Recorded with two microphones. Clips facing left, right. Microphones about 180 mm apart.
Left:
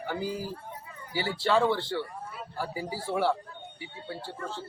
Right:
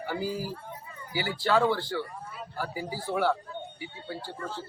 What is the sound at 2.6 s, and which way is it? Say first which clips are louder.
Speech: even; 30° left (ahead or behind).